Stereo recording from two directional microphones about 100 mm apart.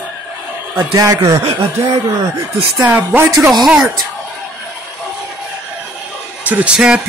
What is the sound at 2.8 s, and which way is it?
Speech, 20° right (ahead or behind).